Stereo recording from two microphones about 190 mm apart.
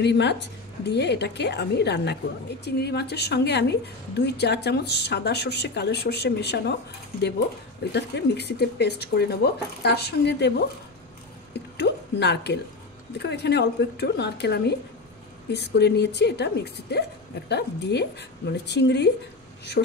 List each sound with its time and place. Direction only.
0.0 s speech: 65° left (ahead or behind)
11.7 s a sound: 60° left (ahead or behind)
13.2 s speech: 60° left (ahead or behind)